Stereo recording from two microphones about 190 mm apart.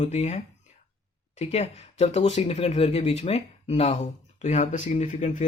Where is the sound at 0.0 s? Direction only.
35° left (ahead or behind).